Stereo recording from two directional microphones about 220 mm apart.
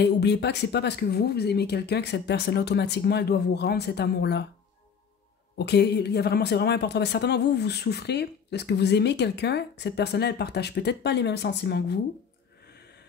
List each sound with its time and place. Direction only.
0.0 s speech: 50° left (ahead or behind)
5.6 s speech: 50° left (ahead or behind)